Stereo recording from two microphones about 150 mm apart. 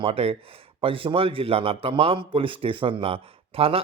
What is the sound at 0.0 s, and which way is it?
A man's voice, 40° right (ahead or behind).